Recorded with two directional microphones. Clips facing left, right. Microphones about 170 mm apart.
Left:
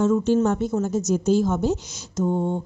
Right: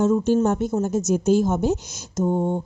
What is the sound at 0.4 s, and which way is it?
Speech, 45° right (ahead or behind).